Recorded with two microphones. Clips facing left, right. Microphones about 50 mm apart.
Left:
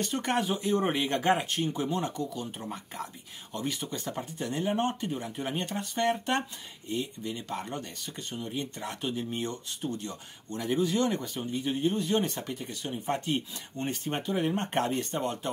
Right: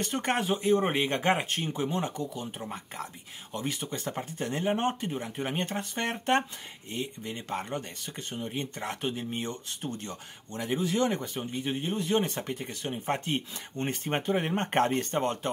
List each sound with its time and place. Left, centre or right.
0.0 s speech: right
3.5 s speech: right
10.5 s speech: right